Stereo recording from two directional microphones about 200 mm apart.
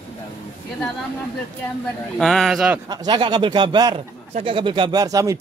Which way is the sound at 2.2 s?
Centre (ahead or behind).